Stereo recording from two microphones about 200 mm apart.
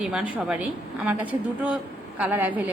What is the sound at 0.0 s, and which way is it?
A woman's voice, 5° right (ahead or behind).